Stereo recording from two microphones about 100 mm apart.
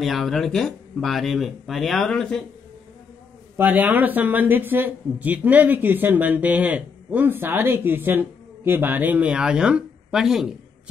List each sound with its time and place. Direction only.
0.0 s speech: centre (ahead or behind)
3.5 s speech: 20° right (ahead or behind)